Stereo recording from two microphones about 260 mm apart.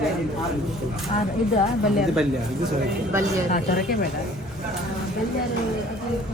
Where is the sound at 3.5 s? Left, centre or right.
Left.